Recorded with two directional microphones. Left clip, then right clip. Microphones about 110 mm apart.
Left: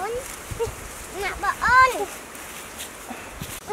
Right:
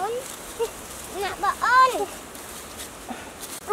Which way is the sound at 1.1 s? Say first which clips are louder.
Even; 5° left (ahead or behind).